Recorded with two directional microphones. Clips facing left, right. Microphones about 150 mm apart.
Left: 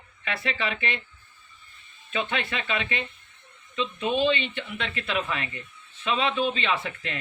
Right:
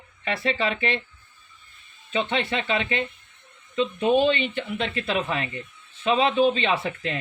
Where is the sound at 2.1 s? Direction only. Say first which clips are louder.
Right 4 dB; 25° right (ahead or behind).